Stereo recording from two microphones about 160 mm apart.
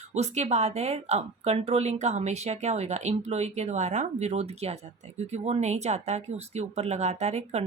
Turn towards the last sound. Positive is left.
turn(degrees=-45)  # may be behind; listen again after turning